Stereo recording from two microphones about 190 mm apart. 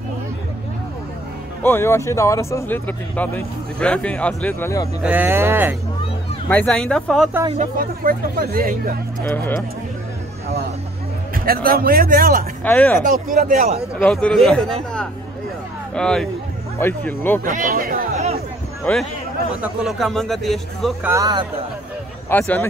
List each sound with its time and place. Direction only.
1.6 s speech: 10° left (ahead or behind)
5.0 s speech: 10° right (ahead or behind)
6.5 s a man's voice: 5° left (ahead or behind)
7.8 s speech: 50° right (ahead or behind)
9.3 s speech: 10° left (ahead or behind)
11.3 s speech: 50° right (ahead or behind)
12.6 s speech: 10° left (ahead or behind)
13.0 s speech: 50° right (ahead or behind)
13.9 s a man's voice: 5° left (ahead or behind)
17.5 s speech: 45° right (ahead or behind)
18.9 s a man's voice: 10° left (ahead or behind)
21.0 s speech: 15° right (ahead or behind)
22.3 s speech: 10° left (ahead or behind)